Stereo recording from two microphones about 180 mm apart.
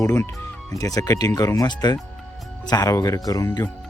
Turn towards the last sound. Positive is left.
turn(degrees=15)  # may be behind; listen again after turning